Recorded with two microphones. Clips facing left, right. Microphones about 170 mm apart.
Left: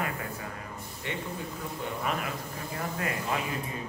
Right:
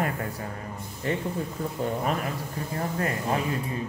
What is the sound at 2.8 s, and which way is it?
Speech, 35° right (ahead or behind).